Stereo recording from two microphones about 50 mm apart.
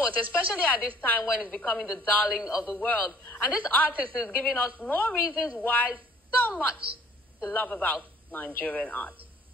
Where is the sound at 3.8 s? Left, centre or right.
Right.